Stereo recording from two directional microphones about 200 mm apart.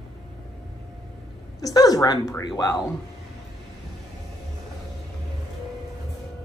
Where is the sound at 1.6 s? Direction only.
20° left (ahead or behind).